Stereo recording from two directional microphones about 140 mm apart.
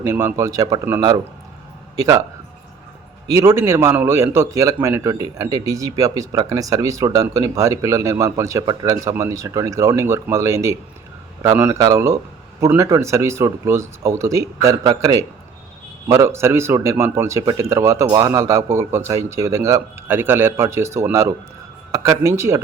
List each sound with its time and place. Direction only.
0.0 s a man's voice: 20° right (ahead or behind)
3.2 s a man's voice: 20° right (ahead or behind)